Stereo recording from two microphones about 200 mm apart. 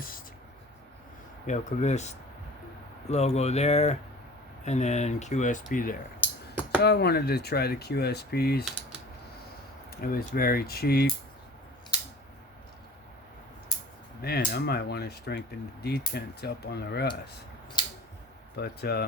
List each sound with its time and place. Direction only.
1.5 s speech: 35° left (ahead or behind)
6.8 s speech: 55° left (ahead or behind)
9.9 s speech: 50° left (ahead or behind)
14.2 s speech: 55° left (ahead or behind)
18.5 s speech: 55° left (ahead or behind)